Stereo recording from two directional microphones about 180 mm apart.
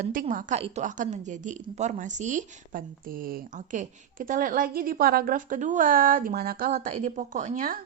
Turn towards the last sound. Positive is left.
turn(degrees=-50)  # may be behind; listen again after turning